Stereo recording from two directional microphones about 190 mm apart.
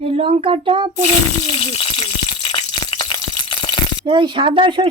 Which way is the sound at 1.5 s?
25° left (ahead or behind).